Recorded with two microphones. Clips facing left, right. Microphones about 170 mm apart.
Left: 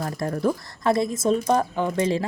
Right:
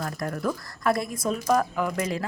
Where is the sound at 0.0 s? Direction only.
25° left (ahead or behind).